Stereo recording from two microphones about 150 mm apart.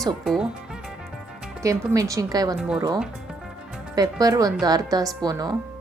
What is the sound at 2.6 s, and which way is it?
Speech, 5° right (ahead or behind).